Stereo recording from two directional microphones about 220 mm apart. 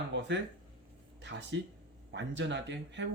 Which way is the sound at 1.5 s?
55° right (ahead or behind).